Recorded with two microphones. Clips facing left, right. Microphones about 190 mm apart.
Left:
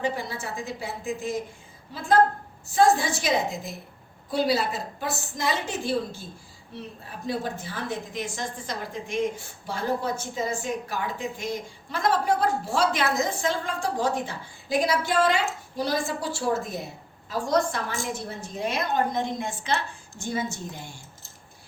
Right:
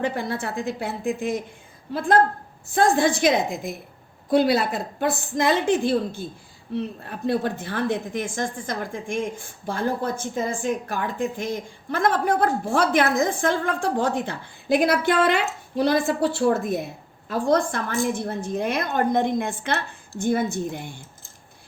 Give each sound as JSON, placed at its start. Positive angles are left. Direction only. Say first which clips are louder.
{"t": 0.0, "sound": "a woman's voice", "louder": "right 4 dB", "side_deg": -55}
{"t": 7.0, "sound": "a woman's voice", "louder": "right 4 dB", "side_deg": -60}